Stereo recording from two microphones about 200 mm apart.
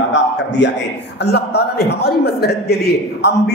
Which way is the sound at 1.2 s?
55° left (ahead or behind).